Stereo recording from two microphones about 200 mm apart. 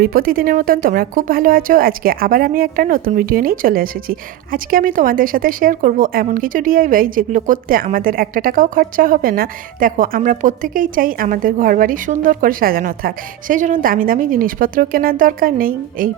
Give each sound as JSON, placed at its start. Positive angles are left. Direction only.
{"t": 0.0, "sound": "a woman's voice", "side_deg": -45}